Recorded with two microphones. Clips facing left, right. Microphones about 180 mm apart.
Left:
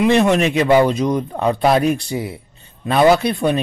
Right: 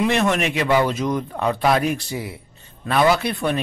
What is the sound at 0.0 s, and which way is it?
Speech, 20° left (ahead or behind).